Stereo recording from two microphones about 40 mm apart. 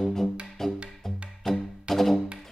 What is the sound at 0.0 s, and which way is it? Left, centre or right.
Music, centre.